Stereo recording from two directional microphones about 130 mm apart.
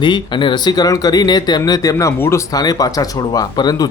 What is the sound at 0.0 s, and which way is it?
Speech, 40° left (ahead or behind).